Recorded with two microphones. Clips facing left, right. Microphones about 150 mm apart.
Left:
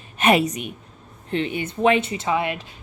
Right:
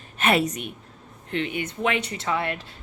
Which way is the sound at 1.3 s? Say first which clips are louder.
Left 3 dB; 25° left (ahead or behind).